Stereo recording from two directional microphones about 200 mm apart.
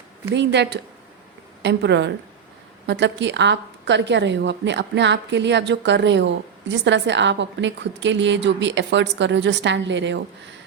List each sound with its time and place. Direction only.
0.3 s a woman's voice: 60° right (ahead or behind)